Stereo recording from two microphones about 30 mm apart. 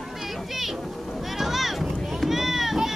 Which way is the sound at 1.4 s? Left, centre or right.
Centre.